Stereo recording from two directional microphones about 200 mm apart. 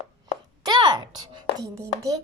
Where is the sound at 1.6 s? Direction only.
15° right (ahead or behind).